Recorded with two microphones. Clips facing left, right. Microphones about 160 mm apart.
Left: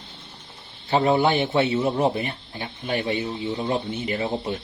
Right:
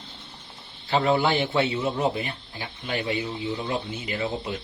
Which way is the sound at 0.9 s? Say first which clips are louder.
Left 3 dB; 20° left (ahead or behind).